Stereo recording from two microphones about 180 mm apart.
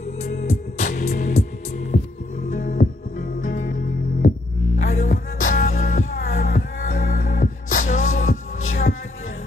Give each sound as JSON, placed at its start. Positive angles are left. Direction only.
{"t": 0.2, "sound": "music", "side_deg": 40}
{"t": 0.7, "sound": "music", "side_deg": 55}
{"t": 2.5, "sound": "music", "side_deg": 55}